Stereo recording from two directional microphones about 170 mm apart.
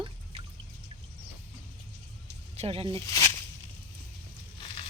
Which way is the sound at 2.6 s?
35° right (ahead or behind).